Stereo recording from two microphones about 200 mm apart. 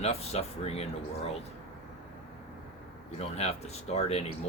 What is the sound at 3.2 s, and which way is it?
Speech, 30° left (ahead or behind).